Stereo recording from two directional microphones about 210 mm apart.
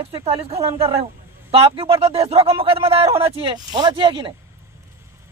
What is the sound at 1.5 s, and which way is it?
A man's voice, 25° right (ahead or behind).